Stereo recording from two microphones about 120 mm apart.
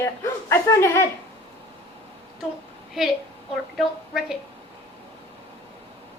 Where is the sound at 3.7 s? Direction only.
5° right (ahead or behind).